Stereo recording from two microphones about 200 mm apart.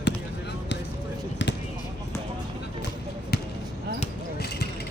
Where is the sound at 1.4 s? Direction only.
65° left (ahead or behind).